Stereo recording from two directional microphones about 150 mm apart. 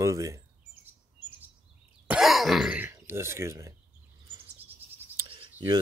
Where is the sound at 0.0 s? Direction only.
20° right (ahead or behind).